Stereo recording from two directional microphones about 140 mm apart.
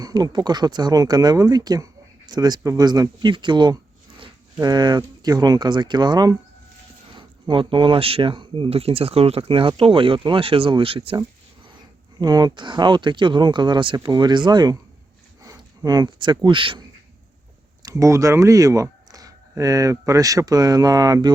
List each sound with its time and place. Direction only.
0.0 s speech: 30° right (ahead or behind)
12.2 s speech: 30° right (ahead or behind)
17.8 s speech: 20° right (ahead or behind)